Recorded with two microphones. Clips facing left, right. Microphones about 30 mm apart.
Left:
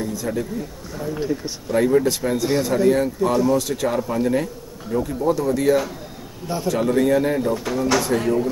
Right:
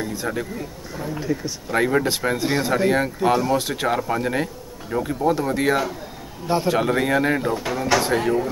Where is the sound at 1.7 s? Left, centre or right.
Right.